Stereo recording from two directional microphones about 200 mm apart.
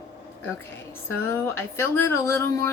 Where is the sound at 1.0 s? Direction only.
10° left (ahead or behind).